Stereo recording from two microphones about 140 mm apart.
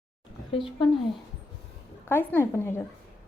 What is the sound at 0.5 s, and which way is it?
Speech, 40° left (ahead or behind).